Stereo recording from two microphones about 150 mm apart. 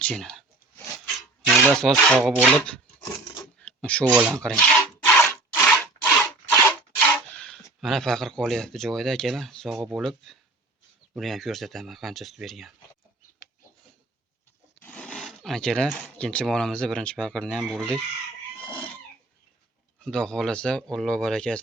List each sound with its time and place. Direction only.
0.0 s speech: 5° left (ahead or behind)
3.6 s a sound: 5° left (ahead or behind)
4.3 s rub: 5° left (ahead or behind)
11.2 s speech: centre (ahead or behind)
14.8 s speech: 10° left (ahead or behind)
18.6 s cat: 35° left (ahead or behind)
20.1 s speech: 5° left (ahead or behind)